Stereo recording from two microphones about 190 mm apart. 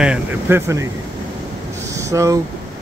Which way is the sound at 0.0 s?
10° right (ahead or behind).